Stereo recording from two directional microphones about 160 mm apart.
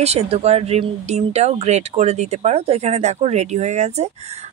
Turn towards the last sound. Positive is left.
turn(degrees=-45)  # may be behind; listen again after turning